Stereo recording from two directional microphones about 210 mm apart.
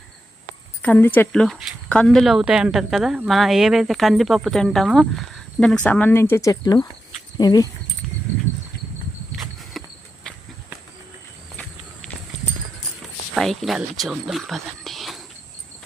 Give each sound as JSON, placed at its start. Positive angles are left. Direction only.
{"t": 0.8, "sound": "speech", "side_deg": 10}
{"t": 9.7, "sound": "a sound", "side_deg": 0}
{"t": 13.3, "sound": "speech", "side_deg": 0}